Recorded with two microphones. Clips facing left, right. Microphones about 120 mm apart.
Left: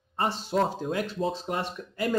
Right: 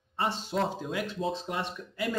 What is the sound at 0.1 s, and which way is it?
Speech, 45° left (ahead or behind).